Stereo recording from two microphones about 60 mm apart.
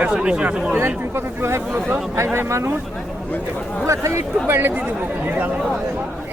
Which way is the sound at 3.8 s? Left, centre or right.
Right.